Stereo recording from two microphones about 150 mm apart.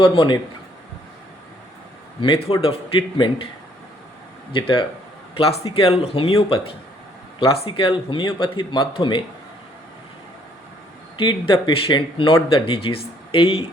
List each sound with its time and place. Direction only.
0.0 s speech: 30° left (ahead or behind)
2.2 s speech: 35° left (ahead or behind)
4.5 s speech: 35° left (ahead or behind)
11.2 s speech: 35° left (ahead or behind)